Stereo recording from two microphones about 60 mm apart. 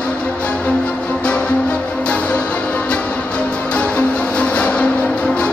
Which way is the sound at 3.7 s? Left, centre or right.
Left.